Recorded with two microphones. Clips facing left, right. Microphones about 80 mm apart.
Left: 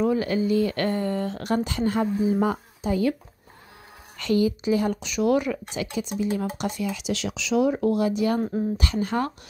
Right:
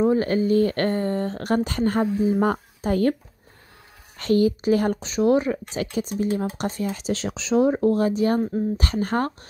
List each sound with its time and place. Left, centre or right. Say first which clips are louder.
0.0 s a woman's voice: right 3 dB; right
4.2 s a woman's voice: right 3 dB; right
5.0 s speech: right 3 dB; right
8.4 s speech: right 2 dB; centre
8.7 s a woman's voice: right 2 dB; right